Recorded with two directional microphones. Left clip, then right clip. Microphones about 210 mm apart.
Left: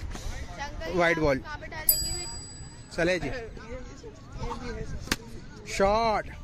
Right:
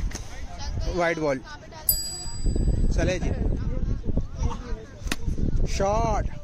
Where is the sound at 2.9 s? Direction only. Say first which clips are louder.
Left 2 dB; 5° left (ahead or behind).